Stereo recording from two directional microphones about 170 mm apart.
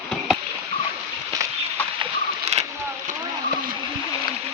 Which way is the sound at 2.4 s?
40° right (ahead or behind).